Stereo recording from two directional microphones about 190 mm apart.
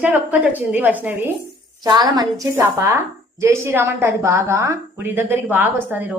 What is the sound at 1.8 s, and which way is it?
A woman's voice, 20° right (ahead or behind).